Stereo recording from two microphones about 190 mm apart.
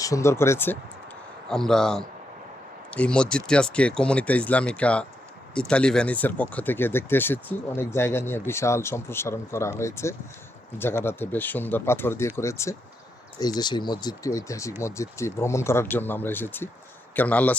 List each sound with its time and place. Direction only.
0.0 s speech: 15° left (ahead or behind)